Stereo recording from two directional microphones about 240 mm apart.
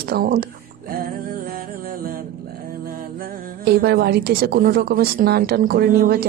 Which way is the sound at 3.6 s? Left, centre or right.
Right.